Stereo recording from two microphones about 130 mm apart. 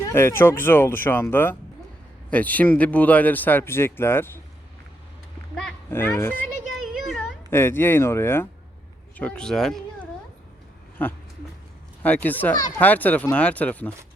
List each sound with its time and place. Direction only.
0.0 s speech: 20° left (ahead or behind)
5.9 s speech: 20° left (ahead or behind)
6.7 s a sound: centre (ahead or behind)
7.5 s speech: 15° left (ahead or behind)